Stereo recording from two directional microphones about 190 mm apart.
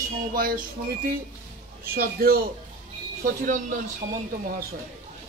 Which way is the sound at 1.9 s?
50° right (ahead or behind).